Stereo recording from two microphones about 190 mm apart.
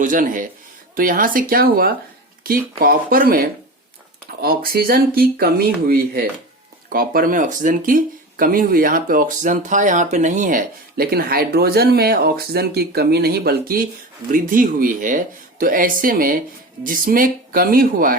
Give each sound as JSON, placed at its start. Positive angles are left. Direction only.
{"t": 0.0, "sound": "speech", "side_deg": -45}